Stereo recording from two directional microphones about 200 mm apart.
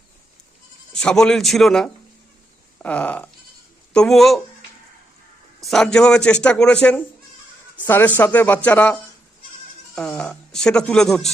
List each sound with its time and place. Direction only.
0.9 s speech: 5° left (ahead or behind)
5.6 s speech: centre (ahead or behind)